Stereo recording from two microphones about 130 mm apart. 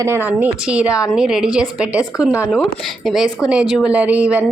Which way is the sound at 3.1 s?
Centre (ahead or behind).